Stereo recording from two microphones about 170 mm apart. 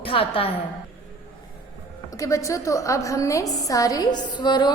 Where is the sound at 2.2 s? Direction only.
20° left (ahead or behind).